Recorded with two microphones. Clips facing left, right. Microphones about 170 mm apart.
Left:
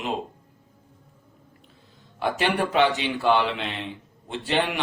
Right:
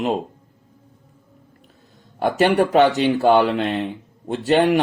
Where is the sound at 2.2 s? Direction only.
45° right (ahead or behind).